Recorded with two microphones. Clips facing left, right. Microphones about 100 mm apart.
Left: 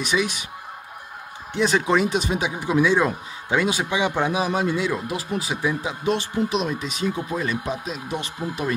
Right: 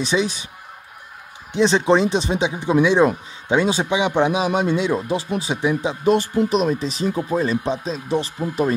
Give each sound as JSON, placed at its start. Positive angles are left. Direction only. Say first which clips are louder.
{"t": 0.0, "sound": "speech", "louder": "right 3 dB", "side_deg": -30}
{"t": 1.5, "sound": "speech", "louder": "right 4 dB", "side_deg": -25}
{"t": 6.0, "sound": "speech", "louder": "right 6 dB", "side_deg": -45}